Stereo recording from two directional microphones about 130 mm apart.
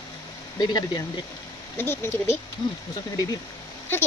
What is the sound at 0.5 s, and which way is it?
Speech, 30° left (ahead or behind).